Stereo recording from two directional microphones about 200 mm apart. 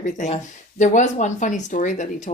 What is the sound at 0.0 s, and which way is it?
Speech, 35° left (ahead or behind).